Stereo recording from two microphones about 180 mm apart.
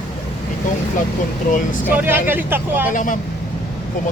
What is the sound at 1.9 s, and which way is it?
Speech, 10° right (ahead or behind).